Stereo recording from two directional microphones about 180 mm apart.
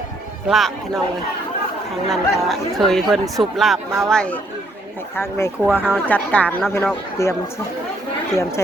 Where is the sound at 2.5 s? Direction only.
Centre (ahead or behind).